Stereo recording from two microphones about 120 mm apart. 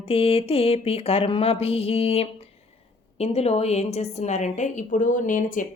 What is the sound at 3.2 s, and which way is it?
A woman's voice, 60° left (ahead or behind).